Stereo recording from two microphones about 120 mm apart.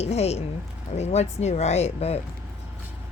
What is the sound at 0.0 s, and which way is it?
Speech, 60° left (ahead or behind).